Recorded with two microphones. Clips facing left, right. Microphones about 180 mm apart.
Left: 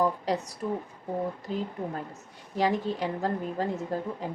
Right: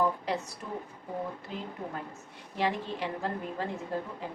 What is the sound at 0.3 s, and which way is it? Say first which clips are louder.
A woman's voice: left 5 dB; 40° left (ahead or behind).